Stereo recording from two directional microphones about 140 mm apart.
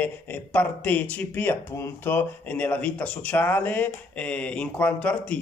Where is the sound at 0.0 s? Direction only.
10° left (ahead or behind).